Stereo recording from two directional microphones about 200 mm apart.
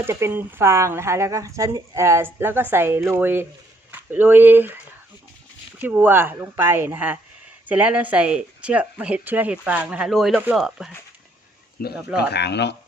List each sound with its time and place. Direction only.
0.0 s speech: 10° right (ahead or behind)
5.8 s speech: 10° right (ahead or behind)
11.8 s speech: 45° left (ahead or behind)
12.3 s speech: 55° left (ahead or behind)